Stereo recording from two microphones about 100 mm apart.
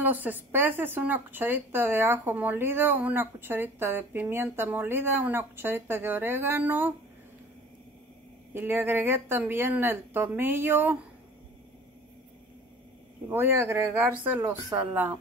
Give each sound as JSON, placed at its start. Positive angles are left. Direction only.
{"t": 0.0, "sound": "speech", "side_deg": -20}
{"t": 8.5, "sound": "speech", "side_deg": -20}
{"t": 13.3, "sound": "speech", "side_deg": -25}